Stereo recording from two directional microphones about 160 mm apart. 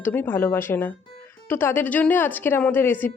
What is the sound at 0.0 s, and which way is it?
Speech, 10° left (ahead or behind).